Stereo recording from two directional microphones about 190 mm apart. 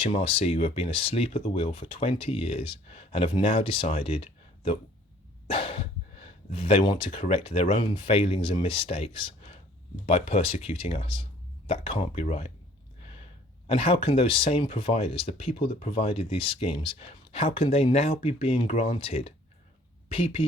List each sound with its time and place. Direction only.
0.0 s speech: 30° left (ahead or behind)
13.7 s speech: 30° left (ahead or behind)